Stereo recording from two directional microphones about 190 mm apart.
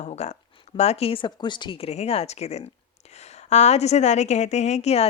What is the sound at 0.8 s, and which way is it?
A woman's voice, 35° left (ahead or behind).